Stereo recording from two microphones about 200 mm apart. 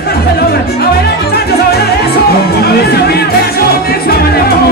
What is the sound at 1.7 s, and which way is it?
Music, 50° left (ahead or behind).